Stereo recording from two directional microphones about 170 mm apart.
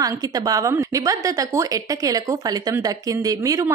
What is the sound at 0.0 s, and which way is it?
Speech, 20° right (ahead or behind).